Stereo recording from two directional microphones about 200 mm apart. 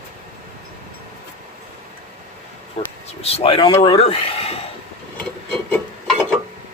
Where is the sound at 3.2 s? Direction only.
30° left (ahead or behind).